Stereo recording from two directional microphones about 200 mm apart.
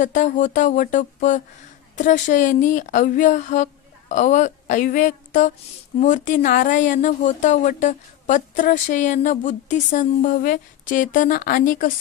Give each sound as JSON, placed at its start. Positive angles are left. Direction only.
{"t": 0.0, "sound": "speech", "side_deg": 40}